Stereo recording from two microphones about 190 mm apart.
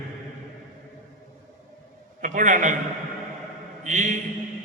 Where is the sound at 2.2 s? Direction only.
40° right (ahead or behind).